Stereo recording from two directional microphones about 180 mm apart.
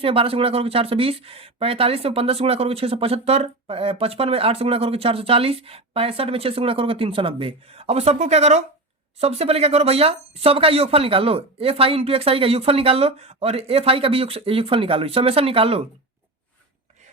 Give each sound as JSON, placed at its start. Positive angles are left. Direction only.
{"t": 0.0, "sound": "speech", "side_deg": -30}